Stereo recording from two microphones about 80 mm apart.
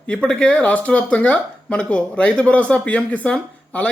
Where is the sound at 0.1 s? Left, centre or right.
Centre.